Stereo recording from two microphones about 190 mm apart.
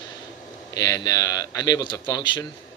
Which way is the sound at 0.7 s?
20° left (ahead or behind).